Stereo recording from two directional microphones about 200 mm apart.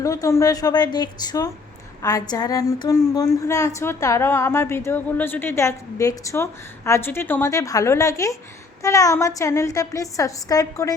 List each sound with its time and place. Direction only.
0.0 s a woman's voice: 15° left (ahead or behind)